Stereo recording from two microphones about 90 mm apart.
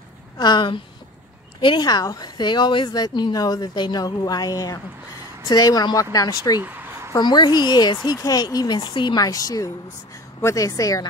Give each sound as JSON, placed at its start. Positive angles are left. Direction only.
{"t": 0.4, "sound": "speech", "side_deg": 55}
{"t": 2.9, "sound": "speech", "side_deg": 50}
{"t": 6.6, "sound": "a sound", "side_deg": -20}
{"t": 7.1, "sound": "a woman's voice", "side_deg": 50}